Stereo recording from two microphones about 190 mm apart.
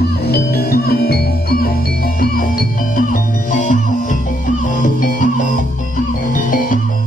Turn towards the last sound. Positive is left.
turn(degrees=45)  # may be behind; listen again after turning